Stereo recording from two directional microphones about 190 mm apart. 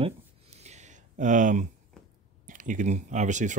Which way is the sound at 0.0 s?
35° right (ahead or behind).